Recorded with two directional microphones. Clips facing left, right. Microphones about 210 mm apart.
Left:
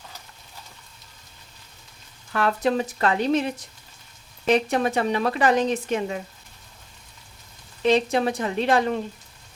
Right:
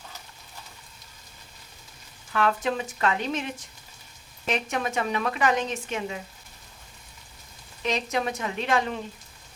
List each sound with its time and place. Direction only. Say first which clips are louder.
2.3 s speech: left 3 dB; 40° left (ahead or behind)
4.4 s speech: left 7 dB; 35° left (ahead or behind)
7.8 s speech: left 8 dB; 30° left (ahead or behind)